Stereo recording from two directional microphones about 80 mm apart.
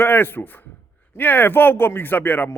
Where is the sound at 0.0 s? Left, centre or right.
Left.